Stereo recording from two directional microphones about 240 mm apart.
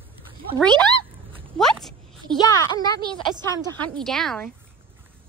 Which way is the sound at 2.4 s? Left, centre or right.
Centre.